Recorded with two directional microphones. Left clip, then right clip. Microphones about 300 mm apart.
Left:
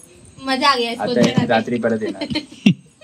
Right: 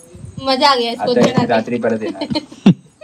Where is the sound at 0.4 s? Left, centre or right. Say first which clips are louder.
Right 4 dB; centre.